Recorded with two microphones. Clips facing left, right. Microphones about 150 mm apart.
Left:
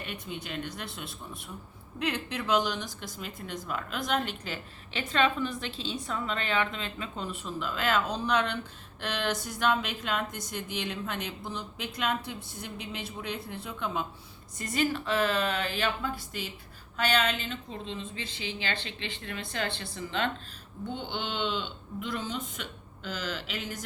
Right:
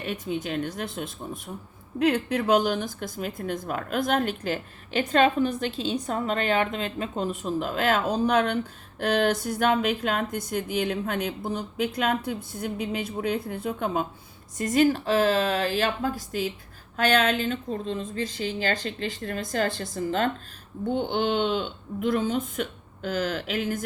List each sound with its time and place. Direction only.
0.0 s speech: 45° right (ahead or behind)